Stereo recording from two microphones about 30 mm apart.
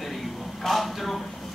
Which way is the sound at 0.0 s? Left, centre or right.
Centre.